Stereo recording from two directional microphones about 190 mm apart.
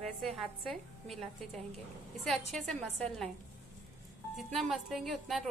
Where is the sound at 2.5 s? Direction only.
Centre (ahead or behind).